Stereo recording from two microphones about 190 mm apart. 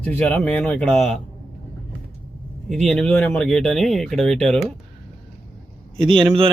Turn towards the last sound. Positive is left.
turn(degrees=-25)  # may be behind; listen again after turning